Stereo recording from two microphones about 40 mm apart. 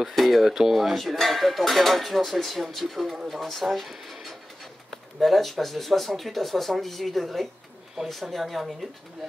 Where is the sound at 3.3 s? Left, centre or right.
Centre.